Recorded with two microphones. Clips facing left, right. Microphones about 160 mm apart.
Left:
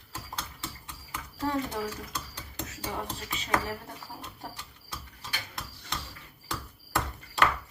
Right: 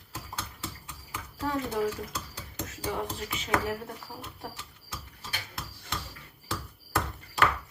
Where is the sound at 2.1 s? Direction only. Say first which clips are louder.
Even; 5° right (ahead or behind).